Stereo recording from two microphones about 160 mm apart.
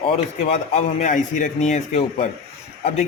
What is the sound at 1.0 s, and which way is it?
Speech, 55° left (ahead or behind).